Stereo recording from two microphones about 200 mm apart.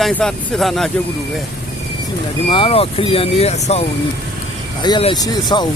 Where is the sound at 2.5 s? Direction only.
25° left (ahead or behind).